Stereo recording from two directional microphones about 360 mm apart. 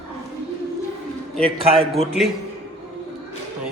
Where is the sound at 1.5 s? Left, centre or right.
Centre.